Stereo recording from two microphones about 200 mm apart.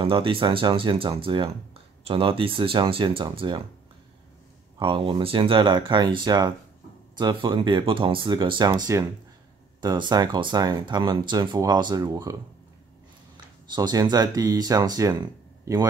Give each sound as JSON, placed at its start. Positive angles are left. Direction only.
{"t": 0.0, "sound": "speech", "side_deg": -25}
{"t": 4.7, "sound": "speech", "side_deg": -25}
{"t": 13.7, "sound": "speech", "side_deg": -20}